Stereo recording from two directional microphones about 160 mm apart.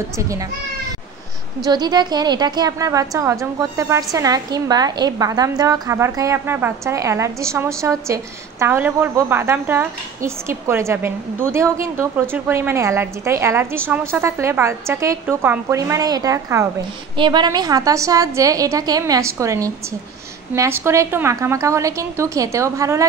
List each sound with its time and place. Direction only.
1.6 s a woman's voice: 25° right (ahead or behind)